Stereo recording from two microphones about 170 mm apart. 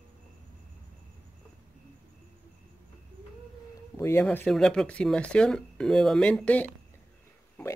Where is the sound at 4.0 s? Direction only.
15° left (ahead or behind).